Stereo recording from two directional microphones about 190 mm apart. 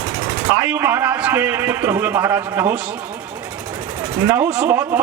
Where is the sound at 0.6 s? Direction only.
10° right (ahead or behind).